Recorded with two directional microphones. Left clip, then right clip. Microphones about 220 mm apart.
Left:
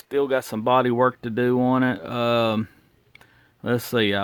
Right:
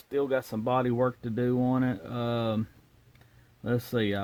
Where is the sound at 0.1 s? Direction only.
35° left (ahead or behind).